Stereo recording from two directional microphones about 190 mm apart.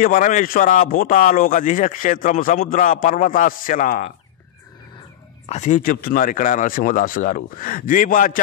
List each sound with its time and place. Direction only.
0.0 s speech: 45° left (ahead or behind)
5.5 s speech: 40° left (ahead or behind)